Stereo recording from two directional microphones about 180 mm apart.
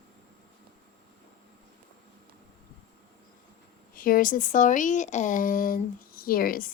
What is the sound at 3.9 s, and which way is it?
Speech, 50° left (ahead or behind).